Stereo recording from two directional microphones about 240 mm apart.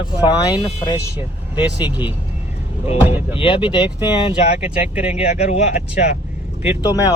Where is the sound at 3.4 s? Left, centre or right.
Left.